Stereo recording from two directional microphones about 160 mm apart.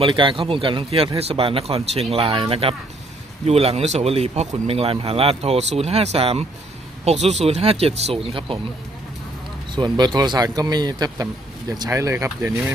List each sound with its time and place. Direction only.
0.0 s speech: 30° right (ahead or behind)
9.8 s speech: 30° right (ahead or behind)